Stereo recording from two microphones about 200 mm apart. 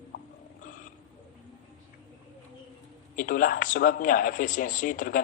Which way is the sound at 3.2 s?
45° left (ahead or behind).